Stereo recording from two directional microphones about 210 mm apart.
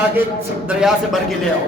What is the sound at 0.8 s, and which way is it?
Speech, centre (ahead or behind).